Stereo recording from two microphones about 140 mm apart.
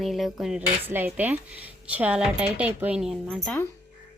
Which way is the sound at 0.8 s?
15° right (ahead or behind).